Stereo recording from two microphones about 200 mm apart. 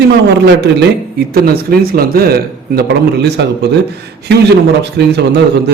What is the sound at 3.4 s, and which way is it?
Speech, 60° right (ahead or behind).